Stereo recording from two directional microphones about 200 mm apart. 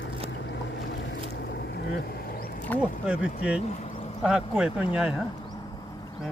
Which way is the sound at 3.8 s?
30° left (ahead or behind).